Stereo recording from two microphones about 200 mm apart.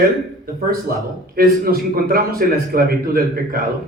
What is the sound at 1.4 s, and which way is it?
A man's voice, 50° right (ahead or behind).